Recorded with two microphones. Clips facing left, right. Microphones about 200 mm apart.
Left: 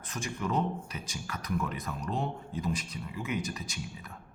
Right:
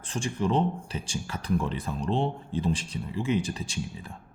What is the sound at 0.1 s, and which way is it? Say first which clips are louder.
Speech: right 6 dB; 30° right (ahead or behind).